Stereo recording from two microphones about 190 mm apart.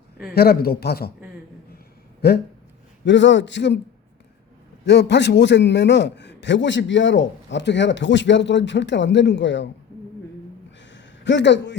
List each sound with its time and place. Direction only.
0.3 s a man's voice: 55° left (ahead or behind)
2.2 s a man's voice: 55° left (ahead or behind)
3.0 s a man's voice: 70° left (ahead or behind)
4.9 s a man's voice: 65° left (ahead or behind)
10.8 s a sound: 75° left (ahead or behind)